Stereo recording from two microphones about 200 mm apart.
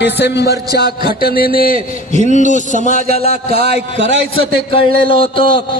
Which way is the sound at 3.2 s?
50° right (ahead or behind).